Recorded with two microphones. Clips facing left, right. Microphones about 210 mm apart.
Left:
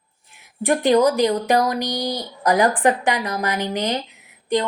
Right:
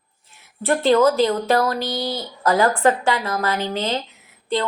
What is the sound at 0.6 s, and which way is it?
A woman's voice, 15° left (ahead or behind).